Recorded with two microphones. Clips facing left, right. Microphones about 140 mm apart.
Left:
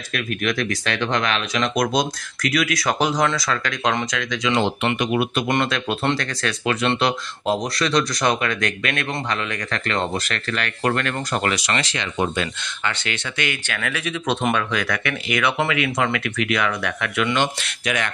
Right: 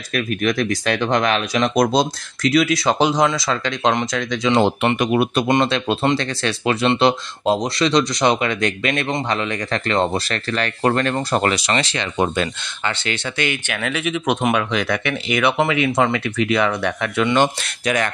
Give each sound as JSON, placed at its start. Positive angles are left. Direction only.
{"t": 0.1, "sound": "speech", "side_deg": -40}
{"t": 4.6, "sound": "speech", "side_deg": -45}
{"t": 5.5, "sound": "speech", "side_deg": -25}
{"t": 13.7, "sound": "speech", "side_deg": -20}
{"t": 17.4, "sound": "speech", "side_deg": -40}